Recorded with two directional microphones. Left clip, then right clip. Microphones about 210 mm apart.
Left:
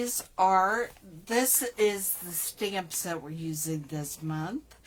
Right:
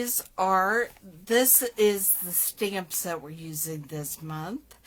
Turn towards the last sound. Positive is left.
turn(degrees=-40)  # may be behind; listen again after turning